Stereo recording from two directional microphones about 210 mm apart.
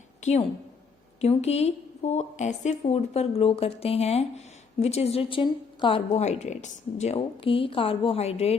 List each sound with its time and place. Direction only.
0.2 s a woman's voice: 30° left (ahead or behind)